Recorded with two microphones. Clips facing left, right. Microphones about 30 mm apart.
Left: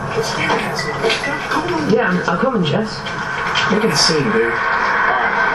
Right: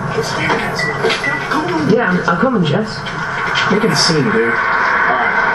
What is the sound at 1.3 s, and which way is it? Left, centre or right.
Speech, centre.